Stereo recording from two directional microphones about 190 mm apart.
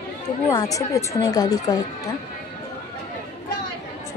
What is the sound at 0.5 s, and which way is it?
Speech, 20° left (ahead or behind).